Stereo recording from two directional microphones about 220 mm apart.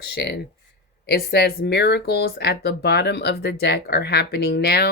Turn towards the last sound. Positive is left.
turn(degrees=45)  # may be behind; listen again after turning